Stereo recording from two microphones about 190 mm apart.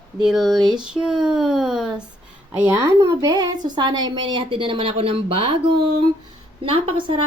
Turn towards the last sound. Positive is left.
turn(degrees=-25)  # may be behind; listen again after turning